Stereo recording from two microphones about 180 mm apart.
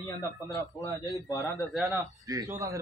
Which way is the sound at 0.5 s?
15° left (ahead or behind).